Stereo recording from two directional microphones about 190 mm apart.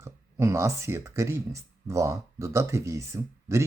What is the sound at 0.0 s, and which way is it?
Speech, 15° right (ahead or behind).